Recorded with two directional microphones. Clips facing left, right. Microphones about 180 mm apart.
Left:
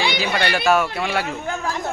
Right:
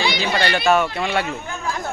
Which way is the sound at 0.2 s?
5° left (ahead or behind).